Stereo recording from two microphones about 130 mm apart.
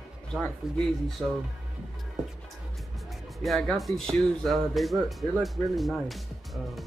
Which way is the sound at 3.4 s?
Centre (ahead or behind).